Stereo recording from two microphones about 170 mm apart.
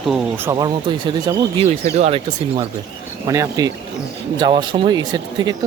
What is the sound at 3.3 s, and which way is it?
Speech, 20° right (ahead or behind).